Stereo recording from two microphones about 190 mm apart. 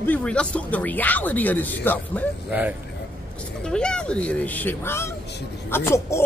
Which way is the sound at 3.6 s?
5° left (ahead or behind).